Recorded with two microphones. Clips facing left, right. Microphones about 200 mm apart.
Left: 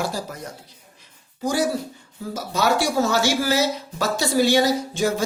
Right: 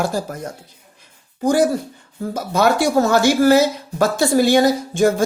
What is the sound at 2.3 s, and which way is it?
Speech, 55° right (ahead or behind).